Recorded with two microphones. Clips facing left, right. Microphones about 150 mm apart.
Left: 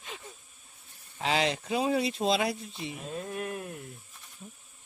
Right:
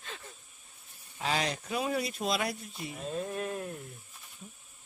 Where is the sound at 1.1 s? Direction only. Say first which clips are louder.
Left 4 dB; 25° left (ahead or behind).